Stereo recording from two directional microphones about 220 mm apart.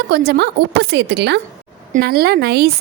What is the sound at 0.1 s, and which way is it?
Speech, 45° right (ahead or behind).